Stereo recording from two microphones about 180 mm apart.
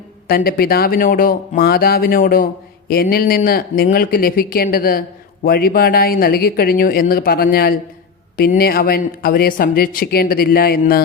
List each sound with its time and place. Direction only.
0.3 s a man's voice: 55° left (ahead or behind)